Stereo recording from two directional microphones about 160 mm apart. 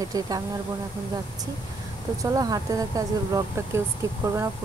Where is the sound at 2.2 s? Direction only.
20° right (ahead or behind).